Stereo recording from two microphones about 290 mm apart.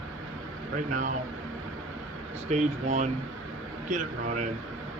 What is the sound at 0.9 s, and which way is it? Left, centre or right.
Speech, right.